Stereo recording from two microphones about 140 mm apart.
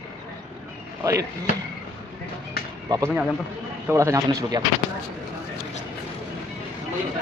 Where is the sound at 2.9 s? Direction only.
25° right (ahead or behind).